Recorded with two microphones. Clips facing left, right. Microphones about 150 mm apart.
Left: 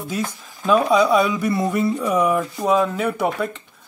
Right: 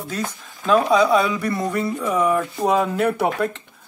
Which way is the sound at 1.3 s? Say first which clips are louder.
Left 2 dB; 20° left (ahead or behind).